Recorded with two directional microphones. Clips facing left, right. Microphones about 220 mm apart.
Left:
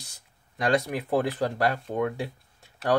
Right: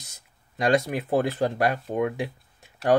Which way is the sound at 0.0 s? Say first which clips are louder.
Left 2 dB; 20° right (ahead or behind).